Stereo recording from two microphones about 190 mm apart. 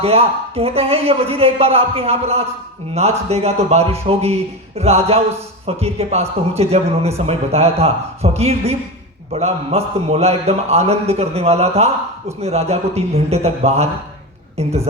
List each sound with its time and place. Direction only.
0.0 s a man's voice: 30° right (ahead or behind)